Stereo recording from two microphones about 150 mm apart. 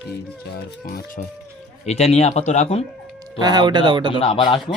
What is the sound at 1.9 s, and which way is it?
Speech, 45° left (ahead or behind).